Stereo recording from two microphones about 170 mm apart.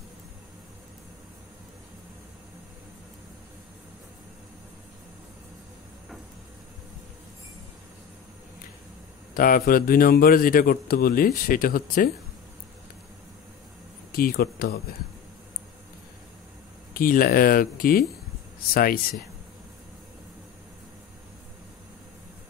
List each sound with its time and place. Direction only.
9.3 s a man's voice: 55° left (ahead or behind)
14.1 s a man's voice: 60° left (ahead or behind)
16.9 s a man's voice: 60° left (ahead or behind)